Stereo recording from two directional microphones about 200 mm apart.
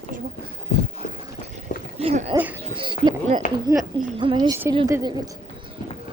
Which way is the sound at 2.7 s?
25° right (ahead or behind).